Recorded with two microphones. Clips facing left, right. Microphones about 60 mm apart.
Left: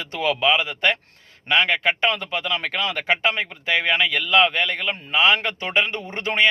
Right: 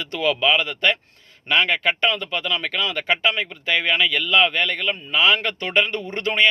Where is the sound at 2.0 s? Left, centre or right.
Left.